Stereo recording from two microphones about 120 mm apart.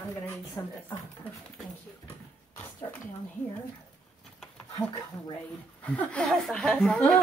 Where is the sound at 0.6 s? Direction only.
25° left (ahead or behind).